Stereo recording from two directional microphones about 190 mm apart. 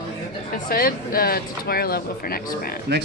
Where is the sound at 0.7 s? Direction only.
50° left (ahead or behind).